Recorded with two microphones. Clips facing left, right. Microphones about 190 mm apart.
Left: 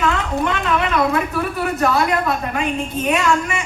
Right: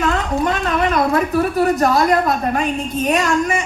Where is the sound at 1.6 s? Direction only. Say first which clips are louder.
Right 2 dB; 40° right (ahead or behind).